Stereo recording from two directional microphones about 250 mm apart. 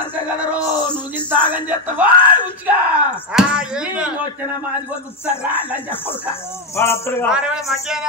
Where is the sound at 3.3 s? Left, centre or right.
Centre.